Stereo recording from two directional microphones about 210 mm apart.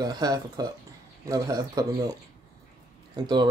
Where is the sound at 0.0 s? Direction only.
20° right (ahead or behind).